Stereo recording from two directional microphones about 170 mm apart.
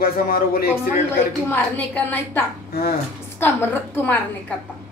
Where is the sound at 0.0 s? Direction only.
60° left (ahead or behind).